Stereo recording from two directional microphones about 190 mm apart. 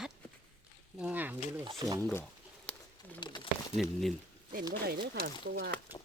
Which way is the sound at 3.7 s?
Centre (ahead or behind).